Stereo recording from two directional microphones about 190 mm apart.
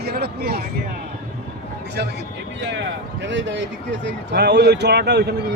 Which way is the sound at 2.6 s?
65° right (ahead or behind).